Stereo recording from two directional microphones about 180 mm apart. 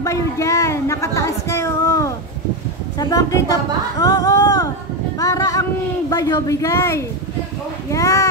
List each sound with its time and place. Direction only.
0.0 s speech: 15° left (ahead or behind)
3.0 s a sound: 20° left (ahead or behind)
5.2 s speech: 20° left (ahead or behind)